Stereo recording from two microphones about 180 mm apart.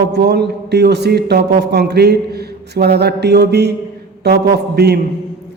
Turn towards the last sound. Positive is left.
turn(degrees=-65)  # may be behind; listen again after turning